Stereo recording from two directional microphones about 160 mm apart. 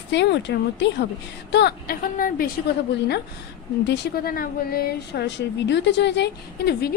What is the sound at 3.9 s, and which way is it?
A woman's voice, 70° left (ahead or behind).